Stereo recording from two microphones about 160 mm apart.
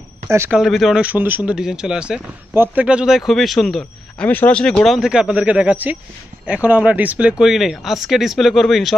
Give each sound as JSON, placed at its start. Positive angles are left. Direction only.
{"t": 0.3, "sound": "speech", "side_deg": -15}
{"t": 0.6, "sound": "speech", "side_deg": 0}